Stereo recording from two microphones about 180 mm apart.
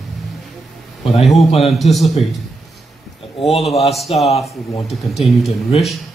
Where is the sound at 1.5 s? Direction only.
35° left (ahead or behind).